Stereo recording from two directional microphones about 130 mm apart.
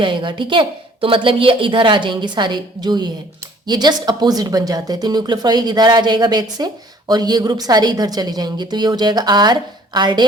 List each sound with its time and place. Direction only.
0.0 s a woman's voice: 40° right (ahead or behind)